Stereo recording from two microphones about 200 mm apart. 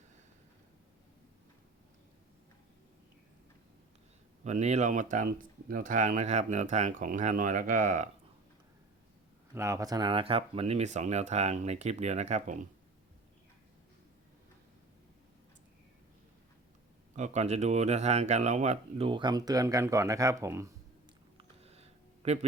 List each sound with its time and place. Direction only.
4.4 s speech: 35° right (ahead or behind)
9.6 s speech: 15° right (ahead or behind); by 12.6 s 35° right (ahead or behind)
17.2 s speech: 35° right (ahead or behind); by 20.7 s 15° right (ahead or behind)
21.3 s a sound: 30° right (ahead or behind)